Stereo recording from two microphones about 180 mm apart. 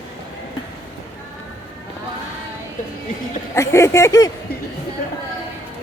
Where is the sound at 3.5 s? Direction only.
15° left (ahead or behind).